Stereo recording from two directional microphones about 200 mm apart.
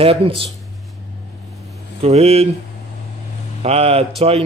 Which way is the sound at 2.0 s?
30° right (ahead or behind).